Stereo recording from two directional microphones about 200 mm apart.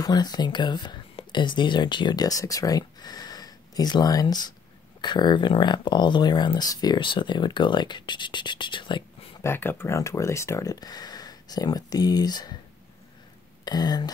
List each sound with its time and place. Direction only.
0.0 s speech: 20° left (ahead or behind)
9.4 s speech: 10° left (ahead or behind)
13.7 s speech: 20° left (ahead or behind)